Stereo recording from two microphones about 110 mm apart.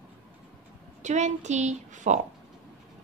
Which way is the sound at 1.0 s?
90° right.